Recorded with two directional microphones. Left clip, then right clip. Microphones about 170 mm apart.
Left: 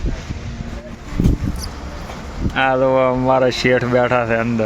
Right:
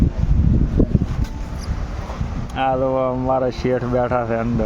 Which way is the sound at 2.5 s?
5° left (ahead or behind).